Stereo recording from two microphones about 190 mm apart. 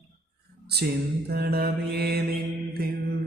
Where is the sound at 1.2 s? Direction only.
55° right (ahead or behind).